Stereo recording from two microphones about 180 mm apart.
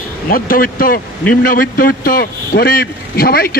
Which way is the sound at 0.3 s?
50° left (ahead or behind).